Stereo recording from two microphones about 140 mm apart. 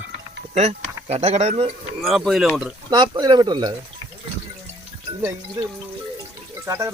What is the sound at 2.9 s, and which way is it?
Speech, 30° right (ahead or behind).